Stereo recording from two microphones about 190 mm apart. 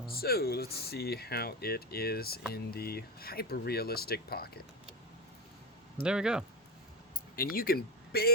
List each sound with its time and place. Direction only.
0.1 s speech: 55° left (ahead or behind)
6.0 s speech: 5° right (ahead or behind)
7.3 s speech: 50° left (ahead or behind)